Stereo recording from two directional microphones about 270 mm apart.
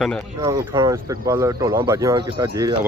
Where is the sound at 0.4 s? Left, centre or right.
Centre.